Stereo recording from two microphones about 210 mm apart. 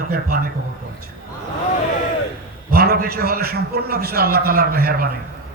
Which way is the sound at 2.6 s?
45° right (ahead or behind).